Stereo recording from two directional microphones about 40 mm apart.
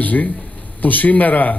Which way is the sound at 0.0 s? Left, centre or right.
Left.